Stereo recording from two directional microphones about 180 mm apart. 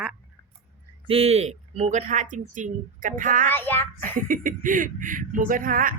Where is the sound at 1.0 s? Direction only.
35° right (ahead or behind).